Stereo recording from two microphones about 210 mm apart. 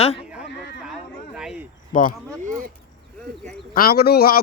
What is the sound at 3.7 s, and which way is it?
Speech, 45° left (ahead or behind).